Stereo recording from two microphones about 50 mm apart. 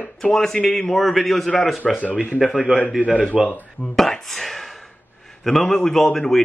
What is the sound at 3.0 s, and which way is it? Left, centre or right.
Speech, right.